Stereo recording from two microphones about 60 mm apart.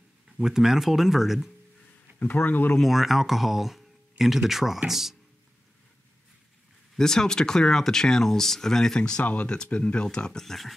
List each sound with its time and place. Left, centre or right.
0.4 s speech: centre
2.1 s speech: left
2.8 s speech: centre
7.0 s speech: centre
9.2 s speech: left; by 10.7 s centre